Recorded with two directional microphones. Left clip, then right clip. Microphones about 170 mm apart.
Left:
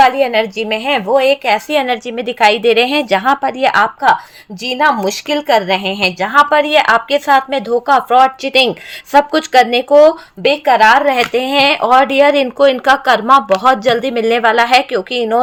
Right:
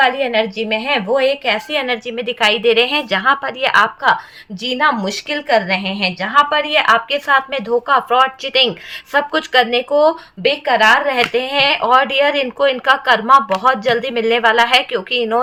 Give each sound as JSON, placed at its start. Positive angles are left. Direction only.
{"t": 0.0, "sound": "speech", "side_deg": 45}